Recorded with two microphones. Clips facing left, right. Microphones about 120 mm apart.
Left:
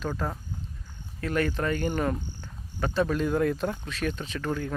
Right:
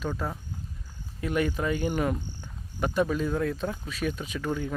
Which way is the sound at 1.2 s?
10° right (ahead or behind).